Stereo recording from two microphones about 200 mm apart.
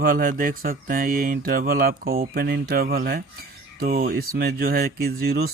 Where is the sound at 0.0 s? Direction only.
45° right (ahead or behind).